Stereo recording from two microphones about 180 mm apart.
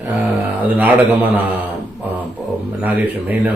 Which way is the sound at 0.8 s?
10° right (ahead or behind).